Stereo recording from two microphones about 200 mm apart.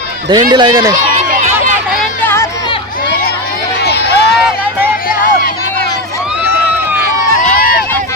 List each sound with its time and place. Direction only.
0.3 s speech: 20° right (ahead or behind)
2.0 s a sound: 10° left (ahead or behind)
3.8 s run: 55° left (ahead or behind)